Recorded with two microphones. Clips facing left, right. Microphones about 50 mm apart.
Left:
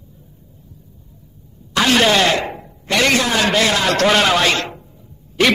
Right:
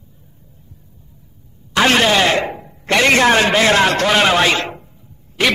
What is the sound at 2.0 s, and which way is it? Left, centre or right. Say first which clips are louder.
Speech: even; centre.